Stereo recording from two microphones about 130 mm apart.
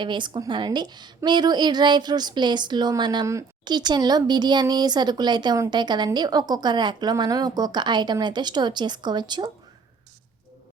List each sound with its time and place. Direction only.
0.0 s a woman's voice: 35° right (ahead or behind)